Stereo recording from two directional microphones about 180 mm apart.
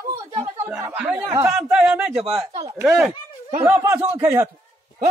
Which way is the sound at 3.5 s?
15° right (ahead or behind).